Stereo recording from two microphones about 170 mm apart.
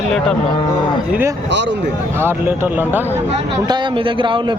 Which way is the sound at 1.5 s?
90° right.